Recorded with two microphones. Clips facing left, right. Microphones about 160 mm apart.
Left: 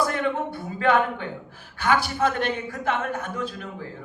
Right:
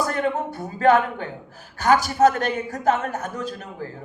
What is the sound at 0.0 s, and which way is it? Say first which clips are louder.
A man's voice: right 1 dB; 40° right (ahead or behind).